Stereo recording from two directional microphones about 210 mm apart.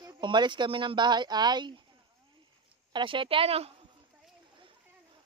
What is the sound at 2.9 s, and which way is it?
Speech, 25° right (ahead or behind).